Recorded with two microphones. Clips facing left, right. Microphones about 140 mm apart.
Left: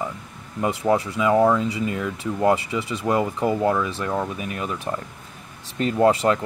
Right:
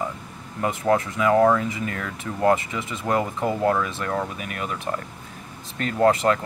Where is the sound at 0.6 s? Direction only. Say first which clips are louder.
Left 1 dB; 10° left (ahead or behind).